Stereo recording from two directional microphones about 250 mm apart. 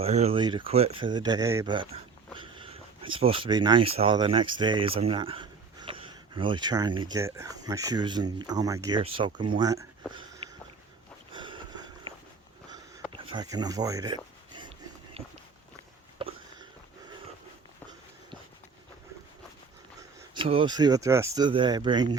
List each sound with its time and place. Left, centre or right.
0.0 s speech: right
10.1 s a sound: centre
11.3 s sniff: centre
13.1 s speech: centre
15.2 s walk: right
16.1 s a sound: right
20.1 s speech: centre